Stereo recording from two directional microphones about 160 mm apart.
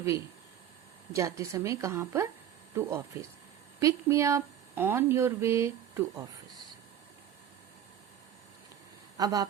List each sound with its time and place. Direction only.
1.1 s a woman's voice: 20° right (ahead or behind)
9.1 s a woman's voice: 20° right (ahead or behind)